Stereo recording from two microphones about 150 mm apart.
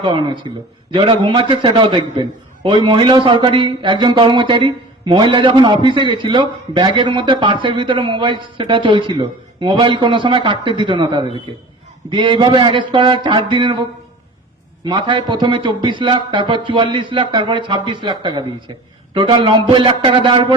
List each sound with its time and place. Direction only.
0.0 s a man's voice: 35° right (ahead or behind)
14.8 s a man's voice: 35° right (ahead or behind)